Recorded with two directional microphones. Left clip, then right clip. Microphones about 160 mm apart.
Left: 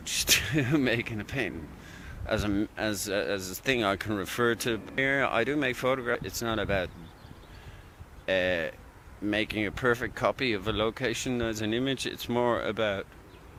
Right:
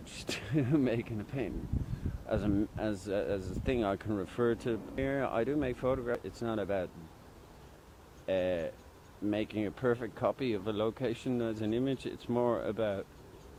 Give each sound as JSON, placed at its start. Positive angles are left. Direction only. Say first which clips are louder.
{"t": 0.0, "sound": "speech", "louder": "left 14 dB", "side_deg": 15}
{"t": 8.3, "sound": "speech", "louder": "left 5 dB", "side_deg": 15}